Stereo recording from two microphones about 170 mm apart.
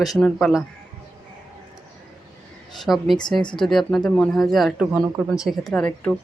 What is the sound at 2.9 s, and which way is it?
Speech, 10° left (ahead or behind).